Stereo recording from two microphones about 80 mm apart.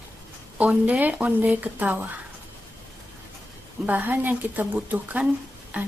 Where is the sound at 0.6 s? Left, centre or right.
Centre.